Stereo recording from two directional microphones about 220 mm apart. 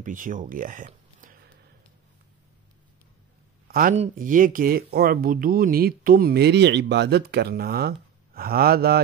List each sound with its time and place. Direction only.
0.0 s speech: 35° right (ahead or behind)
3.6 s speech: 40° right (ahead or behind)